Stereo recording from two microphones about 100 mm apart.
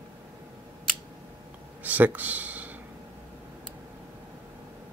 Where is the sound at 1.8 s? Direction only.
15° right (ahead or behind).